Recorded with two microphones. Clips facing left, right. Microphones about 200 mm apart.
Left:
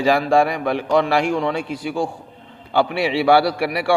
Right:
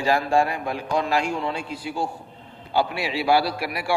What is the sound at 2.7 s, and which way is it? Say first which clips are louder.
A man's voice: left 5 dB; 70° left (ahead or behind).